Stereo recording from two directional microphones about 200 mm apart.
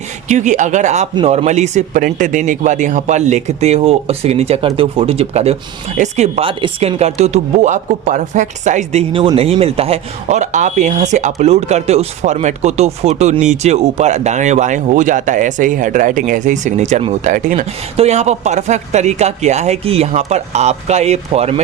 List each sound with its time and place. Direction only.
0.3 s speech: 35° right (ahead or behind)